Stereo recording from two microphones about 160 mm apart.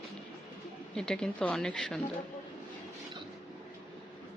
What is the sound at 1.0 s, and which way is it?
Speech, 5° left (ahead or behind).